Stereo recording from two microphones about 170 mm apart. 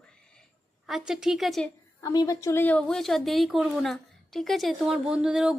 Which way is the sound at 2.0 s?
20° left (ahead or behind).